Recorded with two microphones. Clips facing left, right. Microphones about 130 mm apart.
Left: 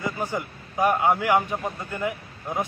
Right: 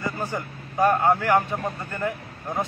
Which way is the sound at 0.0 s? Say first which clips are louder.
Left 1 dB; 15° left (ahead or behind).